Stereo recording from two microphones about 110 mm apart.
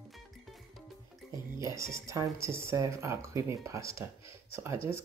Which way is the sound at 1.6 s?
30° right (ahead or behind).